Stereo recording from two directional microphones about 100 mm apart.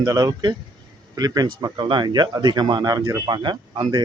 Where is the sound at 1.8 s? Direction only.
50° right (ahead or behind); by 3.1 s 35° right (ahead or behind).